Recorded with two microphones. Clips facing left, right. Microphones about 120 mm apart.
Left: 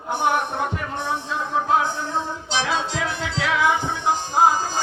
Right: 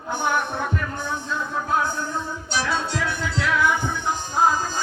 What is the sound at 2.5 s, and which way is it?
Music, 90° left.